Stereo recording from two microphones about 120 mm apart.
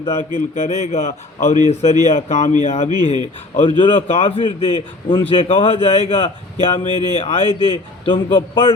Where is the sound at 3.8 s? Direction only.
45° left (ahead or behind).